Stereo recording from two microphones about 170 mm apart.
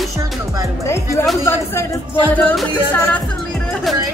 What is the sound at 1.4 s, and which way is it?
Speech, 15° left (ahead or behind).